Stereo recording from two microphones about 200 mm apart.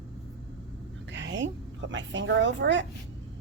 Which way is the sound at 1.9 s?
65° right (ahead or behind).